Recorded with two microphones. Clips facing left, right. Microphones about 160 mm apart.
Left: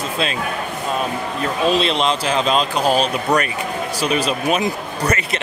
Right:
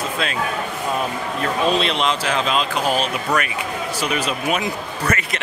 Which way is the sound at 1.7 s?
30° left (ahead or behind).